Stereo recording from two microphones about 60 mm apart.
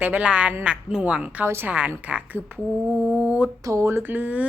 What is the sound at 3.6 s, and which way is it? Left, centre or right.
Speech, right.